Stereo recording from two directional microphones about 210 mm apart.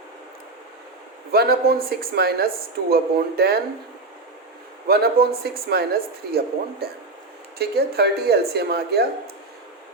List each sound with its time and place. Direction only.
1.3 s speech: 45° right (ahead or behind)
4.9 s speech: 45° right (ahead or behind)